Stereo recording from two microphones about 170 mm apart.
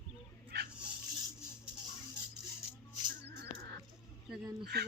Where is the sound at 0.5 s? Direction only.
75° right (ahead or behind).